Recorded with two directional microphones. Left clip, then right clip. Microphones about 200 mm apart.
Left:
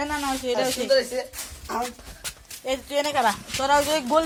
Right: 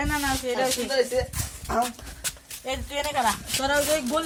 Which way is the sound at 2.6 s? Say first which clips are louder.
Left 4 dB; 30° left (ahead or behind).